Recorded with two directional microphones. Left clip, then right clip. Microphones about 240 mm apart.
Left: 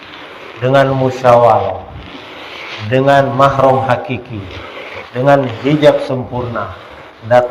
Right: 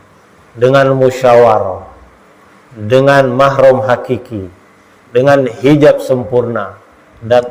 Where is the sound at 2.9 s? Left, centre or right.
Right.